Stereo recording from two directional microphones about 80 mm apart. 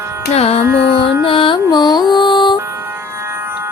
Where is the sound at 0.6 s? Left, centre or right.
Right.